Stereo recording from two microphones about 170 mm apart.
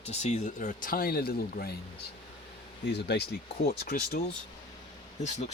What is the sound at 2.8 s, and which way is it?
Speech, 80° left.